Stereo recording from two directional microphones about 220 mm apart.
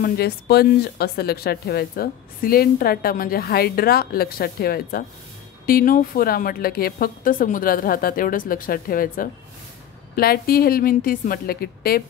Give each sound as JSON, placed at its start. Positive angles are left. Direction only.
{"t": 0.0, "sound": "a woman's voice", "side_deg": 45}